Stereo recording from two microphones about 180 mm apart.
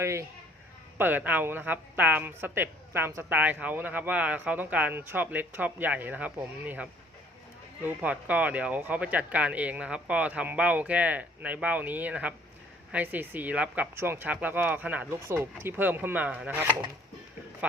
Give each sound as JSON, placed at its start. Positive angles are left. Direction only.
{"t": 0.0, "sound": "speech", "side_deg": -15}
{"t": 7.9, "sound": "speech", "side_deg": -10}